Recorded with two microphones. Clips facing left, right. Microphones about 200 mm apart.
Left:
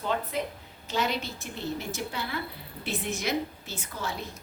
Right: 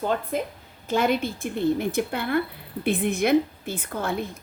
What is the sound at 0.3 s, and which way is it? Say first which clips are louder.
A woman's voice: right 4 dB; 50° right (ahead or behind).